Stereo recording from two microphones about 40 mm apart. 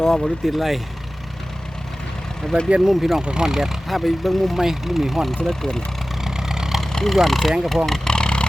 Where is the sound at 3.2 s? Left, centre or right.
Centre.